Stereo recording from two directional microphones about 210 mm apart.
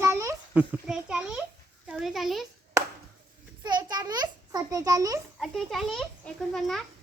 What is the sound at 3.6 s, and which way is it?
A child's voice, 20° right (ahead or behind).